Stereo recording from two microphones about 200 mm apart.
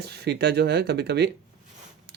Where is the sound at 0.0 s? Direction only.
55° right (ahead or behind).